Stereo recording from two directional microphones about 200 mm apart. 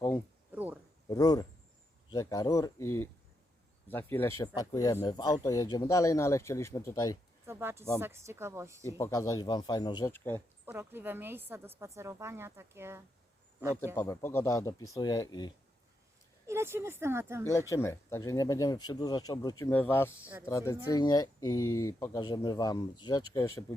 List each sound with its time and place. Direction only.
0.5 s a sound: 10° right (ahead or behind)
1.1 s speech: 20° left (ahead or behind)
7.4 s a sound: 10° right (ahead or behind)
7.9 s a woman's voice: 15° right (ahead or behind)
9.0 s speech: 15° left (ahead or behind)
10.1 s speech: 10° left (ahead or behind)
10.7 s a woman's voice: 10° right (ahead or behind)
13.9 s speech: 15° left (ahead or behind)
16.5 s a woman's voice: 10° right (ahead or behind)
17.7 s speech: 15° left (ahead or behind)
21.6 s speech: 90° left
21.8 s speech: 15° left (ahead or behind)